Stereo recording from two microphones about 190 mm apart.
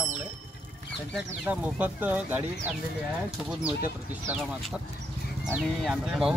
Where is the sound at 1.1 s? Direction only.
5° right (ahead or behind).